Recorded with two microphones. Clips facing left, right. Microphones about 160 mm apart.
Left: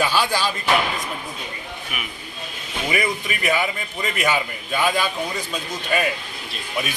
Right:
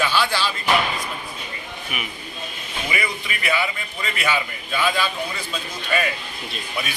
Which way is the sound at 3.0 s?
45° left (ahead or behind).